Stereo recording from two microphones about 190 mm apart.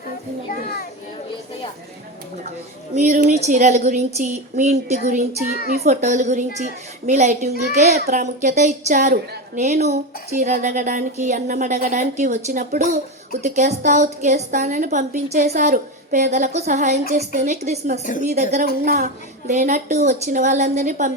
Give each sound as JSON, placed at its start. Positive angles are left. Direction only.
{"t": 0.5, "sound": "children playing", "side_deg": 50}
{"t": 2.9, "sound": "speech", "side_deg": -40}
{"t": 18.0, "sound": "a woman's voice", "side_deg": 45}
{"t": 18.5, "sound": "speech", "side_deg": -40}